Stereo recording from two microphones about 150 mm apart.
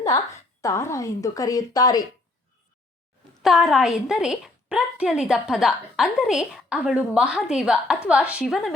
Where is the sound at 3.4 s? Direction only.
Centre (ahead or behind).